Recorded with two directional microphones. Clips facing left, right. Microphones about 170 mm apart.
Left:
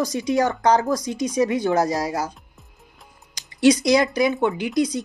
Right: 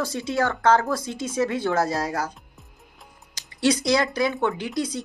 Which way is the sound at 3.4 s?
15° left (ahead or behind).